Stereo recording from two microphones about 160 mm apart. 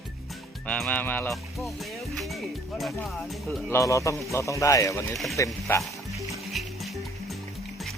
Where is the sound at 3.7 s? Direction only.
20° left (ahead or behind).